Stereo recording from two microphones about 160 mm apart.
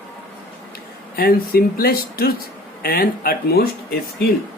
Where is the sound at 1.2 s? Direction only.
70° left (ahead or behind).